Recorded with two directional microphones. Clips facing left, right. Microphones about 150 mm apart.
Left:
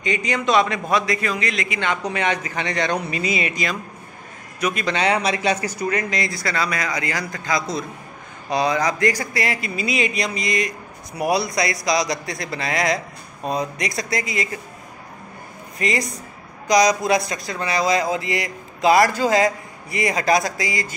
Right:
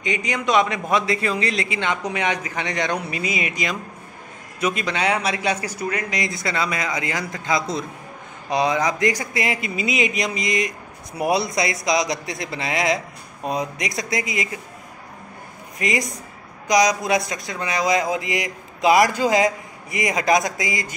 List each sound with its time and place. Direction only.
0.0 s speech: 15° right (ahead or behind); by 1.8 s 30° right (ahead or behind)
1.8 s speech: 15° right (ahead or behind)
4.6 s a man's voice: 25° right (ahead or behind)
4.8 s speech: 5° right (ahead or behind)
15.8 s speech: 15° right (ahead or behind)